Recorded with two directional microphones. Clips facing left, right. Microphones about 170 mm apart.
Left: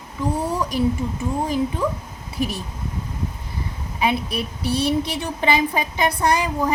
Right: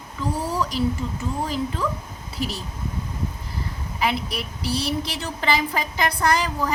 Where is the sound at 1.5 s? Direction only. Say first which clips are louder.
Left 5 dB; 15° left (ahead or behind).